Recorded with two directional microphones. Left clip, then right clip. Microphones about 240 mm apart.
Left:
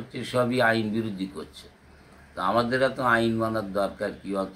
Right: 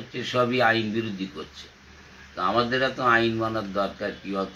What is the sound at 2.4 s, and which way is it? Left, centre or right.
Speech, left.